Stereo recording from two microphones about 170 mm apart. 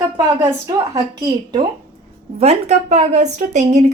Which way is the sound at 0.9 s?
25° right (ahead or behind).